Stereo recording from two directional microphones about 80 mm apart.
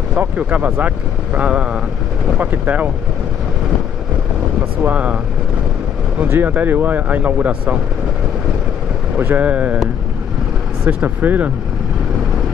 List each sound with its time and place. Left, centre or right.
0.1 s speech: centre
4.8 s speech: centre
6.2 s speech: right
9.1 s speech: right
11.0 s speech: right